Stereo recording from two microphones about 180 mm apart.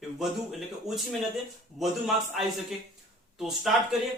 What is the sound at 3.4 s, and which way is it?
Speech, centre (ahead or behind).